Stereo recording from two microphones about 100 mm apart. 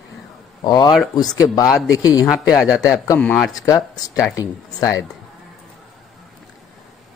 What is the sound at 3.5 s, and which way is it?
Speech, 40° left (ahead or behind).